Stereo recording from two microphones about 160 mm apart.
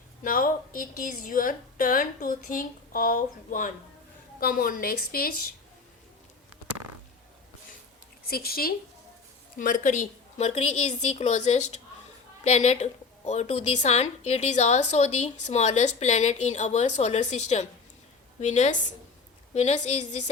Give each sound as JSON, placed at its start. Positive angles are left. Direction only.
{"t": 0.2, "sound": "a woman's voice", "side_deg": 60}
{"t": 8.3, "sound": "a woman's voice", "side_deg": 70}
{"t": 9.6, "sound": "a woman's voice", "side_deg": 55}